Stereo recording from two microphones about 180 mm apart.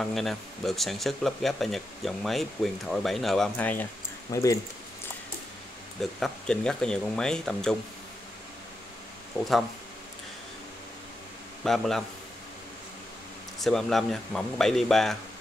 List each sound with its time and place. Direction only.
0.0 s speech: centre (ahead or behind); by 4.6 s 20° left (ahead or behind)
5.9 s speech: centre (ahead or behind)
11.6 s speech: centre (ahead or behind)
13.6 s speech: centre (ahead or behind)